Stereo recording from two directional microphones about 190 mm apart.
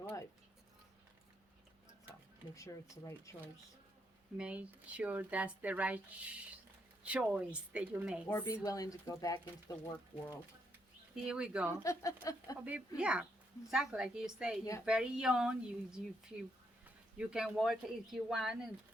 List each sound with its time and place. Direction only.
0.0 s a sound: 15° left (ahead or behind)
2.6 s speech: 15° left (ahead or behind)
4.4 s speech: 5° right (ahead or behind)
8.3 s speech: 10° left (ahead or behind)
11.1 s speech: 5° right (ahead or behind)
11.7 s speech: 15° left (ahead or behind)
13.0 s speech: 5° right (ahead or behind)
14.6 s speech: 15° left (ahead or behind)
14.8 s speech: 5° right (ahead or behind)
17.2 s speech: 5° right (ahead or behind)